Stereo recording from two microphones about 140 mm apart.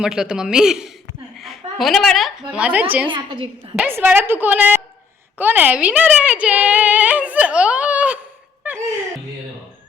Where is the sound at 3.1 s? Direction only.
40° right (ahead or behind).